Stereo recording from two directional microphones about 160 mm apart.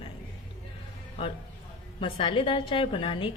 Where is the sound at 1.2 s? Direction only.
35° left (ahead or behind).